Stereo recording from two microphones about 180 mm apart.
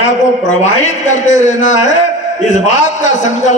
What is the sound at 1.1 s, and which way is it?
Speech, 40° left (ahead or behind).